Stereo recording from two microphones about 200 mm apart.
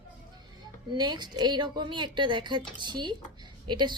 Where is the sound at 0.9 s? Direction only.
20° right (ahead or behind).